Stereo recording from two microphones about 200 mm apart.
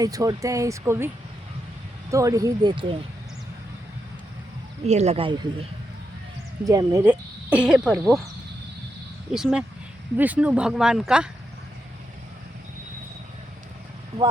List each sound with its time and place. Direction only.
0.0 s speech: 15° right (ahead or behind)
4.8 s speech: 35° right (ahead or behind)
6.7 s speech: 15° right (ahead or behind)
9.3 s speech: 5° right (ahead or behind)